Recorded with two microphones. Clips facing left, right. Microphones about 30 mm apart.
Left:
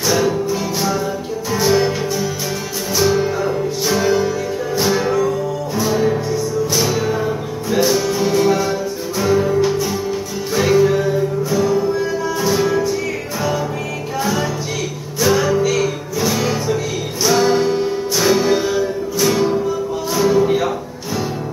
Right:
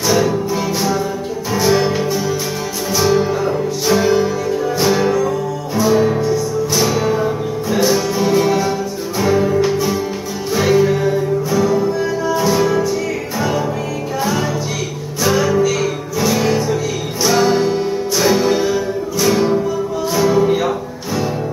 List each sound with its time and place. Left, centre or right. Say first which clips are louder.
0.0 s music: right 1 dB; centre
11.6 s music: even; centre
12.0 s music: right 2 dB; centre
15.2 s music: right 1 dB; centre